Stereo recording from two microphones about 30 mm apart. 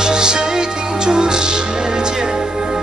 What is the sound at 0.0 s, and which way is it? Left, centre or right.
Music, right.